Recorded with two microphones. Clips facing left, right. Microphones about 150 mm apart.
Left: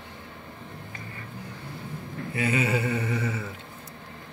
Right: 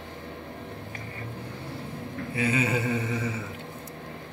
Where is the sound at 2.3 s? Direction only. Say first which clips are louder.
Even; 25° right (ahead or behind).